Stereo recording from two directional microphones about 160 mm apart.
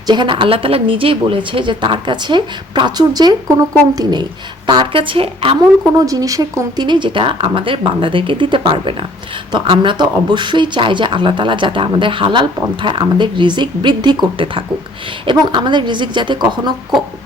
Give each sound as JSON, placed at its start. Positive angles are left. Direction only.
{"t": 0.1, "sound": "speech", "side_deg": -30}
{"t": 5.8, "sound": "a woman's voice", "side_deg": -20}